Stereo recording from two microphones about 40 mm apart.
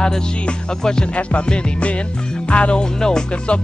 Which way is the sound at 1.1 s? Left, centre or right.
Left.